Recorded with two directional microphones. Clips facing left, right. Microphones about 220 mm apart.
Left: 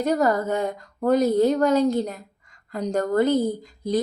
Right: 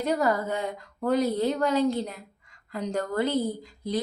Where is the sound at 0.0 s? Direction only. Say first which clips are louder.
Left 4 dB; 45° left (ahead or behind).